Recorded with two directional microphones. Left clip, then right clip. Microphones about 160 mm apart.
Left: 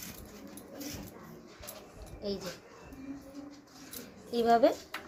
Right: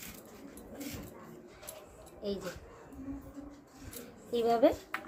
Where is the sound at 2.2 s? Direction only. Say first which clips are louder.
Even; 15° right (ahead or behind).